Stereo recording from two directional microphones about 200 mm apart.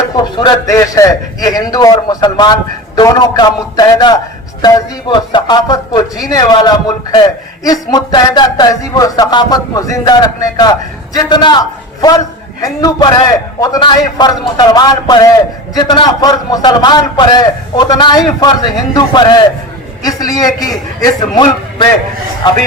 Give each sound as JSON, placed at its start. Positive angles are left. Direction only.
{"t": 0.7, "sound": "a man's voice", "side_deg": 15}
{"t": 12.6, "sound": "a man's voice", "side_deg": 20}